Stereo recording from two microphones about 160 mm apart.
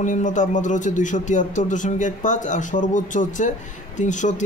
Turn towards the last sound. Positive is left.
turn(degrees=50)  # may be behind; listen again after turning